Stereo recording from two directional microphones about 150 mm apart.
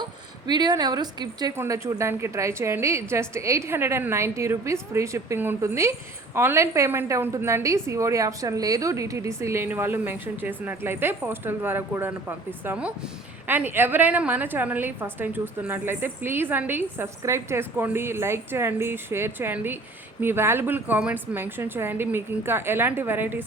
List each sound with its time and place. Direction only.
0.0 s a woman's voice: 30° right (ahead or behind); by 23.5 s 15° right (ahead or behind)